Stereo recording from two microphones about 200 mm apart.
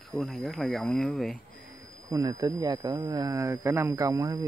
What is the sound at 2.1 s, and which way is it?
Speech, 15° right (ahead or behind).